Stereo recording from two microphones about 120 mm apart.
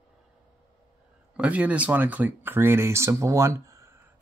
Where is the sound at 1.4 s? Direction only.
10° right (ahead or behind).